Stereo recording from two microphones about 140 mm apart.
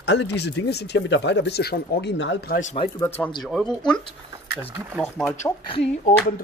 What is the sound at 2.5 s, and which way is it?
Speech, 65° left (ahead or behind).